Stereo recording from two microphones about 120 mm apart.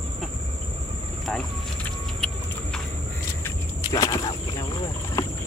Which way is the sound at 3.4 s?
25° left (ahead or behind).